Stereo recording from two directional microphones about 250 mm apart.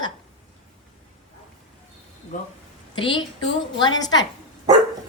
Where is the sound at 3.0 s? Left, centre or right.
Centre.